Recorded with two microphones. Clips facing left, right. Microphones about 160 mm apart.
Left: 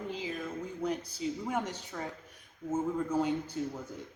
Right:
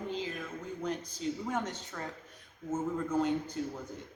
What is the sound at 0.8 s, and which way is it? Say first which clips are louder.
Speech: left 1 dB; 10° left (ahead or behind).